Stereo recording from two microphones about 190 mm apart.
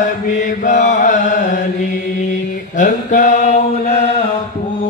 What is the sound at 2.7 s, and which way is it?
Mantra, 40° left (ahead or behind).